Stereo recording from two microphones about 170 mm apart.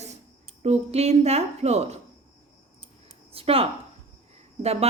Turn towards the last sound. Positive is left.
turn(degrees=-40)  # may be behind; listen again after turning